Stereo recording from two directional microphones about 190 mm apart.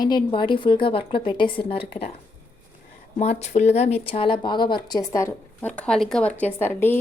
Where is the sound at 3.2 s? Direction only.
35° left (ahead or behind); by 6.9 s 10° left (ahead or behind).